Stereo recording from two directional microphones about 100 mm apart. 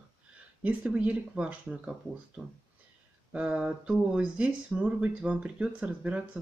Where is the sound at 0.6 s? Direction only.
15° right (ahead or behind).